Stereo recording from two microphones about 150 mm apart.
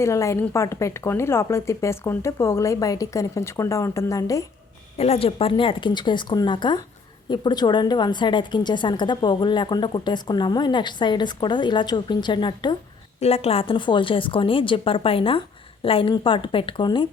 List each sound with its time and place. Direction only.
0.0 s speech: 20° left (ahead or behind)
4.9 s a woman's voice: 45° left (ahead or behind)
13.1 s a woman's voice: 45° left (ahead or behind)